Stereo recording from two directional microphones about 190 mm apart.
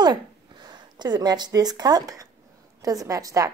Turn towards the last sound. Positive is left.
turn(degrees=-20)  # may be behind; listen again after turning